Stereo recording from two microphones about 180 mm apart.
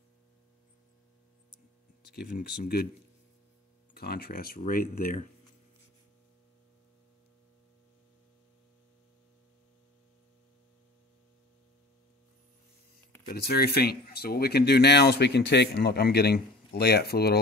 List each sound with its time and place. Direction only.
2.0 s speech: 60° left (ahead or behind)
3.9 s speech: 60° left (ahead or behind)
13.3 s speech: 60° left (ahead or behind)